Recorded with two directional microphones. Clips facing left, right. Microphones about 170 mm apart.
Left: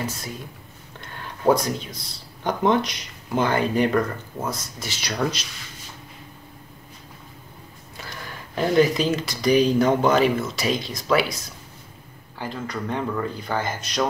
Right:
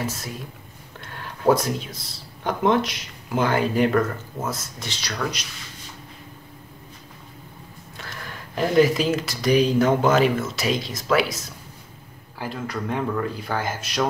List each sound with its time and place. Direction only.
0.0 s speech: centre (ahead or behind)
5.1 s speech: 30° left (ahead or behind)
8.0 s speech: centre (ahead or behind)
12.4 s speech: 5° right (ahead or behind)